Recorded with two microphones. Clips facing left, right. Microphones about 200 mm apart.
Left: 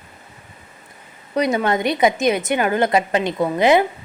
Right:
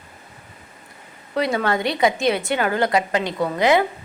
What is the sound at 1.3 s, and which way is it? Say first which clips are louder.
A woman's voice: left 2 dB; 20° left (ahead or behind).